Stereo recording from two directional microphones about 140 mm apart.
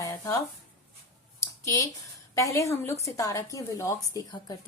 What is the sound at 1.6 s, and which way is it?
A woman's voice, 25° left (ahead or behind).